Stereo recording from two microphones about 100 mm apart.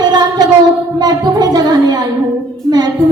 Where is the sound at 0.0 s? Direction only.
45° right (ahead or behind).